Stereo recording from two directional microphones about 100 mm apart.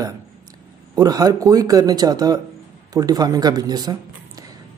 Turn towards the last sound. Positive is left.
turn(degrees=-40)  # may be behind; listen again after turning